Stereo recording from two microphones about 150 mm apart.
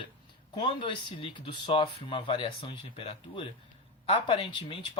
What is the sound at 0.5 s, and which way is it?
Speech, 35° left (ahead or behind).